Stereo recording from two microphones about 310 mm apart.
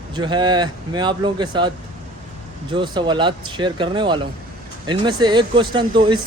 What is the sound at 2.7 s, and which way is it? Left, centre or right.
Speech, centre.